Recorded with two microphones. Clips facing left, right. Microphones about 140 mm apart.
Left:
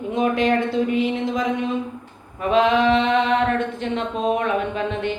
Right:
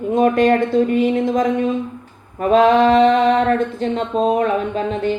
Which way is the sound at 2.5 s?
45° right (ahead or behind).